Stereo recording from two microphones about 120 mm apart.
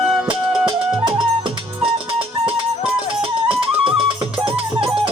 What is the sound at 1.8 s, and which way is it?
Music, 50° right (ahead or behind).